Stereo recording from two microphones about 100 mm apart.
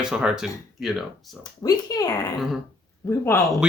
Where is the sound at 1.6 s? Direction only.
40° left (ahead or behind).